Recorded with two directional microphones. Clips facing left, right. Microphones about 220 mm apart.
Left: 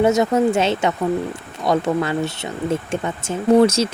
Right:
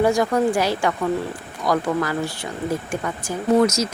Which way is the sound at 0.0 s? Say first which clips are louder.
Left 2 dB; 20° left (ahead or behind).